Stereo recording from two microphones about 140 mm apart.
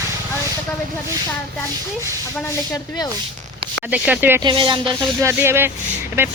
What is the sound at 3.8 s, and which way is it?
Speech, 10° right (ahead or behind).